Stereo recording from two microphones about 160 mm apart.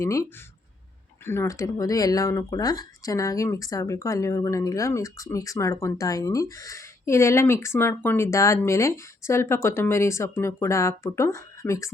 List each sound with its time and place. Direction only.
0.0 s speech: 20° left (ahead or behind)